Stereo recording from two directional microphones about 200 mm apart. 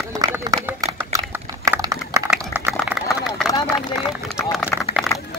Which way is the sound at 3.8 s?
20° left (ahead or behind).